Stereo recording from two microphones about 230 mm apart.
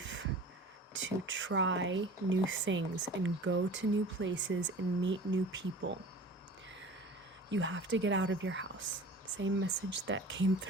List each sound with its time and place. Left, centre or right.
0.9 s speech: right
7.5 s speech: right